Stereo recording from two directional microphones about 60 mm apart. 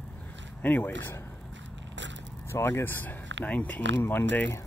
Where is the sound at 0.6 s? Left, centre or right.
Left.